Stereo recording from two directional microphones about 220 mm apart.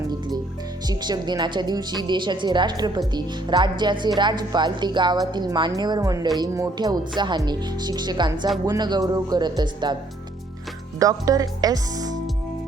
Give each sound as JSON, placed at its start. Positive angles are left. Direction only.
{"t": 0.9, "sound": "a woman's voice", "side_deg": -20}
{"t": 11.0, "sound": "speech", "side_deg": -15}